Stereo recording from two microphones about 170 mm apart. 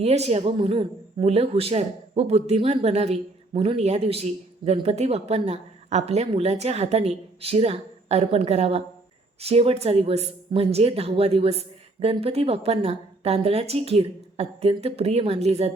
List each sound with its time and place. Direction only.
0.0 s speech: 40° right (ahead or behind)